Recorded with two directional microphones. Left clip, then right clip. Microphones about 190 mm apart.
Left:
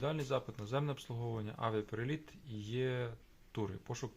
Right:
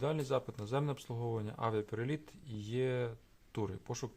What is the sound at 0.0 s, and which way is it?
Speech, 45° right (ahead or behind).